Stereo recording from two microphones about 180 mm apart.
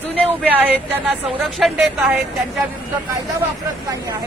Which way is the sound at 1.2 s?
Centre (ahead or behind).